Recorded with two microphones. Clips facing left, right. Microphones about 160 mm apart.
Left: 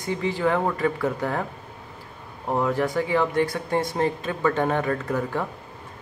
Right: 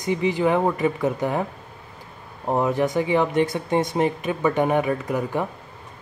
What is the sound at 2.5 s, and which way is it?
Speech, 20° right (ahead or behind).